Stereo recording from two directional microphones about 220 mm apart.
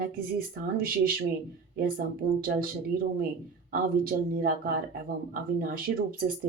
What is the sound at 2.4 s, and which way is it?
Speech, 40° right (ahead or behind).